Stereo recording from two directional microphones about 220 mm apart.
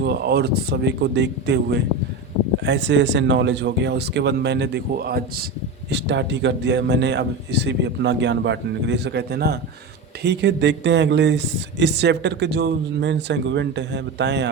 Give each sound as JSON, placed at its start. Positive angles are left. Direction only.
{"t": 0.0, "sound": "speech", "side_deg": -50}